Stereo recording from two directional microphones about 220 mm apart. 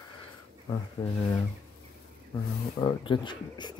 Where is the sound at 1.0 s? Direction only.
20° left (ahead or behind).